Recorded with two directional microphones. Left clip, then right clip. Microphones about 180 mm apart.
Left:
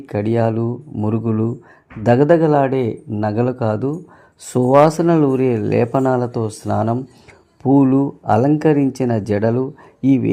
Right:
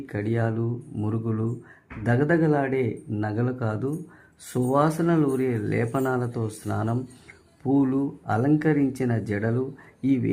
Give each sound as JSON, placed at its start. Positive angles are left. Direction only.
{"t": 0.0, "sound": "speech", "side_deg": 35}